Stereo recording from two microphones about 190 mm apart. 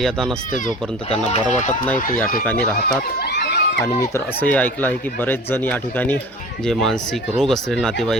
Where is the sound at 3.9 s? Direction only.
15° left (ahead or behind).